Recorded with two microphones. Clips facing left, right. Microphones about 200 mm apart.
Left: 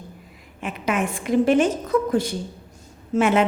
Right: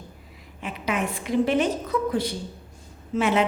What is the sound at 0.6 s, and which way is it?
A woman's voice, 50° left (ahead or behind).